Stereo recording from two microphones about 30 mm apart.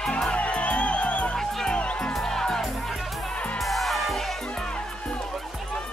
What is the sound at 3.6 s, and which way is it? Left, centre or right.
Music, centre.